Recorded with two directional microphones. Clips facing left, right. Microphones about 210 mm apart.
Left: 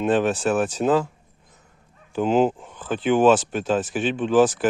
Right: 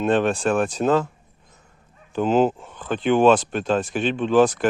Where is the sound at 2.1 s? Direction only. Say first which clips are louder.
Right 1 dB; 10° left (ahead or behind).